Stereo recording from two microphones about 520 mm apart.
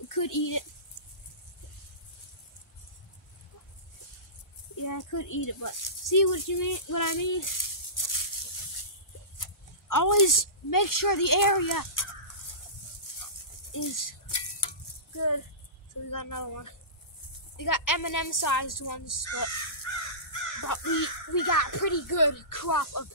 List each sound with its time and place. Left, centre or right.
0.1 s speech: left
4.8 s speech: left
9.8 s speech: left
13.1 s dog: left
13.7 s speech: left
20.6 s speech: left